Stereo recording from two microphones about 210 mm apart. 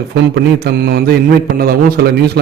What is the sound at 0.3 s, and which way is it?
Speech, 50° right (ahead or behind).